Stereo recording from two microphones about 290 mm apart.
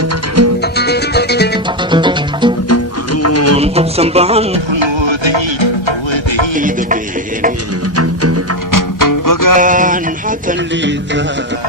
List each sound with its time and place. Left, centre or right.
0.6 s music: left
1.9 s music: centre
2.6 s music: left
3.6 s music: right
6.6 s music: right
7.9 s music: right
8.7 s music: left
9.6 s a sound: right